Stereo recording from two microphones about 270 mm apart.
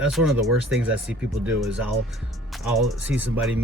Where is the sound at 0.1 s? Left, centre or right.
Centre.